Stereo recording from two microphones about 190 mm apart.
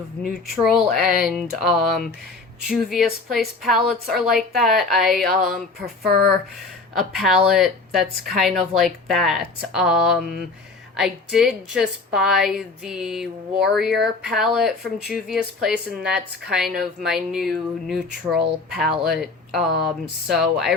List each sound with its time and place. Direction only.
0.6 s a woman's voice: centre (ahead or behind)
6.1 s speech: 60° right (ahead or behind)
6.9 s a woman's voice: centre (ahead or behind)